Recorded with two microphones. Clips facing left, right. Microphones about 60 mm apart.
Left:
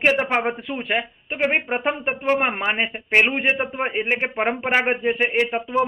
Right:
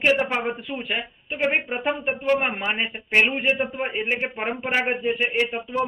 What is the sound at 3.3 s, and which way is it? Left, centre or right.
A man's voice, left.